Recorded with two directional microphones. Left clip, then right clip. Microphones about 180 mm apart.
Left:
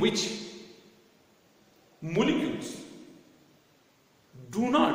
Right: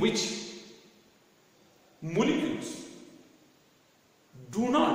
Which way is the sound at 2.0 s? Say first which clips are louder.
Left 1 dB; 15° left (ahead or behind).